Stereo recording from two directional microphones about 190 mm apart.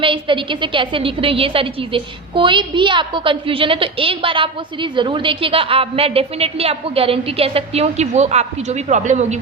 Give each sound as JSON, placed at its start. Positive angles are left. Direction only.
{"t": 0.0, "sound": "a woman's voice", "side_deg": -25}